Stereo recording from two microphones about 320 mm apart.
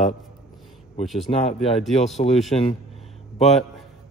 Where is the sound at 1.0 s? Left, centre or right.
Centre.